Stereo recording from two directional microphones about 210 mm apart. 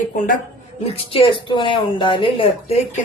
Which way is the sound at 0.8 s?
30° left (ahead or behind).